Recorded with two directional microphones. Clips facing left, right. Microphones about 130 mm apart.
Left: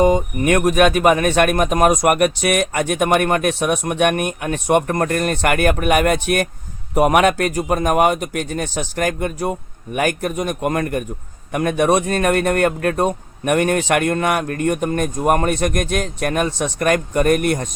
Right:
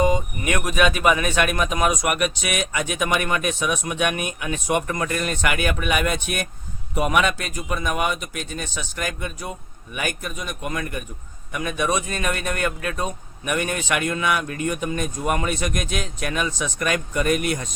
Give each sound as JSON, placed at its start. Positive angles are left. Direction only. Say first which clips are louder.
{"t": 0.0, "sound": "speech", "louder": "left 6 dB", "side_deg": 50}
{"t": 11.5, "sound": "speech", "louder": "left 8 dB", "side_deg": 65}